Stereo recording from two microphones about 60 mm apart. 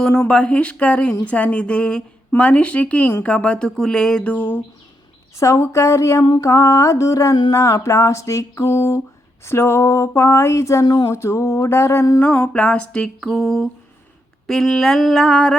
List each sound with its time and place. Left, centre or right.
0.3 s speech: centre
4.2 s speech: left
5.4 s mantra: left
9.5 s a sound: left
12.2 s speech: left
13.1 s speech: centre